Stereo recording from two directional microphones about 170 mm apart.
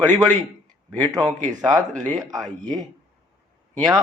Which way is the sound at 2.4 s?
Centre (ahead or behind).